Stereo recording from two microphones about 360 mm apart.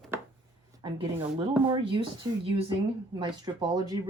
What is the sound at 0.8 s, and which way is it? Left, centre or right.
Speech, centre.